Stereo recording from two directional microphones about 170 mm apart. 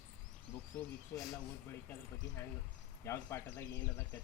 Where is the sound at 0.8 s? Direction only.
5° left (ahead or behind).